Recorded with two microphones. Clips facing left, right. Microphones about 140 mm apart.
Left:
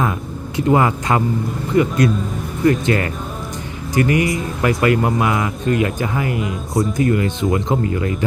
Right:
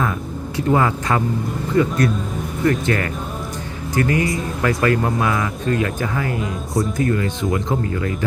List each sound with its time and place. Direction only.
0.5 s speech: 20° left (ahead or behind)